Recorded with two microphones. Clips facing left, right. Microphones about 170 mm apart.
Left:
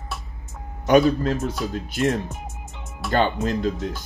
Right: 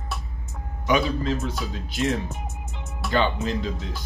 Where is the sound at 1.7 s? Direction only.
50° left (ahead or behind).